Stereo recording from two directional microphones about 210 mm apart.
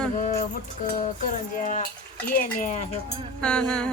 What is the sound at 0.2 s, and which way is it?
Music, 40° left (ahead or behind).